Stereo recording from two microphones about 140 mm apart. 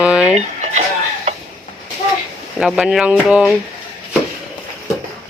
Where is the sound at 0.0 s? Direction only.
5° right (ahead or behind).